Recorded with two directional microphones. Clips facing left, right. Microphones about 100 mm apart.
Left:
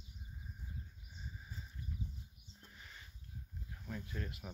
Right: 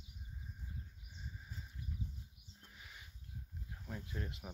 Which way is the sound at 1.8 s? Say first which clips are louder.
Even; 10° right (ahead or behind).